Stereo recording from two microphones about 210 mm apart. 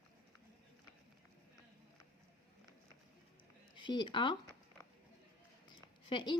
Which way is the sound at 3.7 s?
20° left (ahead or behind).